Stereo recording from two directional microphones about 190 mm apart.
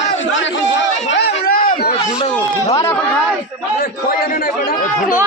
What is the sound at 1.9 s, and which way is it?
Speech, 20° left (ahead or behind).